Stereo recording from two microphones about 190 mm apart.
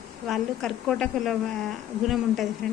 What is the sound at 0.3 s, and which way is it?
A woman's voice, centre (ahead or behind).